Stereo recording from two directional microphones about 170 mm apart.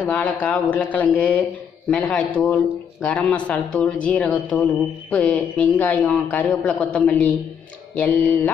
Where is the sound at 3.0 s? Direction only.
10° left (ahead or behind).